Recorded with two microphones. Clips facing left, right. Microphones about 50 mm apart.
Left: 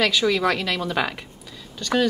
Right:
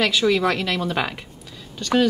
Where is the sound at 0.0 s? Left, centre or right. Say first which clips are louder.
Right 1 dB; centre.